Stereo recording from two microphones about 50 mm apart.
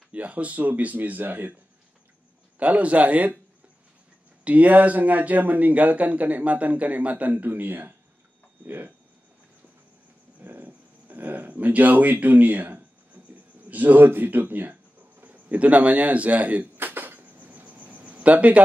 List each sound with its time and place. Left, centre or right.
0.1 s speech: right
2.6 s speech: right
4.5 s speech: right
10.4 s a sound: right
13.7 s speech: right
16.7 s a sound: right
17.5 s cricket: right